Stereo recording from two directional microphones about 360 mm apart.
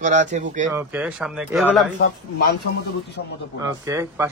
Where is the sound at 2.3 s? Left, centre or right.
Left.